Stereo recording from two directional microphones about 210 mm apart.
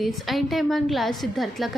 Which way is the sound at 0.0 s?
Centre (ahead or behind).